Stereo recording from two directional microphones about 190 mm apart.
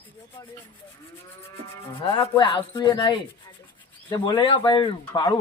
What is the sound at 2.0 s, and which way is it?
A man's voice, 30° left (ahead or behind).